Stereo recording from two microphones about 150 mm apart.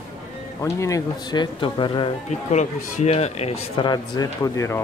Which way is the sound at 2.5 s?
50° left (ahead or behind).